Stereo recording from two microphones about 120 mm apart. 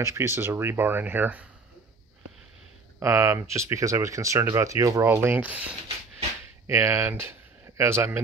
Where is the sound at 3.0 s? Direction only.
20° right (ahead or behind).